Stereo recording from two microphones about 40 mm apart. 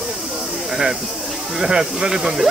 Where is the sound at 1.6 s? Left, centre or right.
Centre.